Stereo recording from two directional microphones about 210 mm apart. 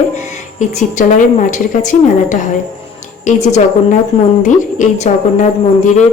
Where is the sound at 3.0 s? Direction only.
35° left (ahead or behind).